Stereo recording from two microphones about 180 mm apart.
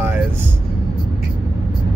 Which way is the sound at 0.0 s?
10° right (ahead or behind).